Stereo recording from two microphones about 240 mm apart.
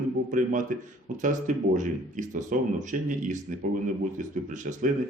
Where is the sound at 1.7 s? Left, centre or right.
Right.